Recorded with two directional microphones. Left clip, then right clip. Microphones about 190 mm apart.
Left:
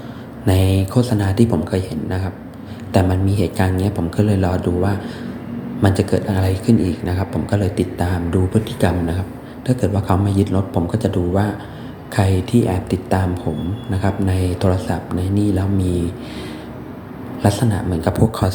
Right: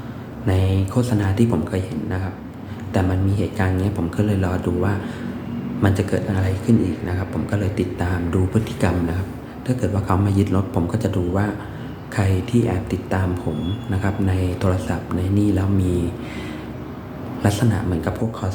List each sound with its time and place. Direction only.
0.4 s speech: 25° left (ahead or behind)
17.4 s speech: 10° left (ahead or behind)
18.1 s speech: 25° left (ahead or behind)